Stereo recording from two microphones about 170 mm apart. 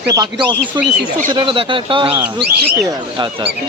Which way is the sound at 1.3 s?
30° right (ahead or behind).